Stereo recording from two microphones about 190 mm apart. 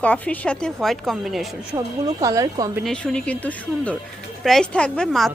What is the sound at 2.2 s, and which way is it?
Speech, 15° right (ahead or behind).